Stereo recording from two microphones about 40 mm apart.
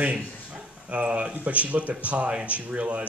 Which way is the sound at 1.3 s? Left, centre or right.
Right.